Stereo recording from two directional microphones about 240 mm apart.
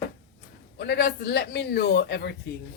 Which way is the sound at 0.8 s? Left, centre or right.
Left.